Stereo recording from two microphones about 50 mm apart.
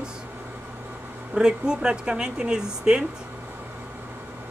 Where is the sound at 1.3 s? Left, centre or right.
Centre.